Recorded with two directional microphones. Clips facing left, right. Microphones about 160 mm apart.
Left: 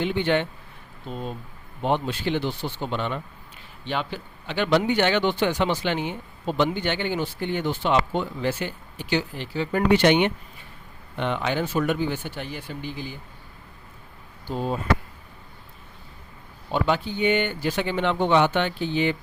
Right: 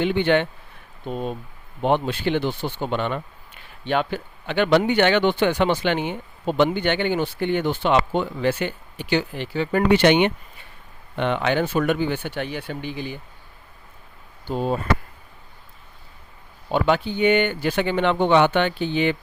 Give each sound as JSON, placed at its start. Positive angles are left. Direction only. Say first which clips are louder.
{"t": 0.0, "sound": "speech", "louder": "right 4 dB", "side_deg": -65}
{"t": 1.8, "sound": "speech", "louder": "right 4 dB", "side_deg": -60}
{"t": 16.7, "sound": "speech", "louder": "right 3 dB", "side_deg": -60}